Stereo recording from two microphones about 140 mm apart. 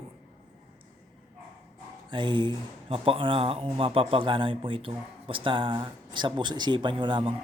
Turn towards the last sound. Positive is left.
turn(degrees=-35)  # may be behind; listen again after turning